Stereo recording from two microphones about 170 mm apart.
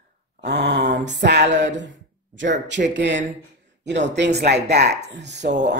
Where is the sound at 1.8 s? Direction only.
90° right.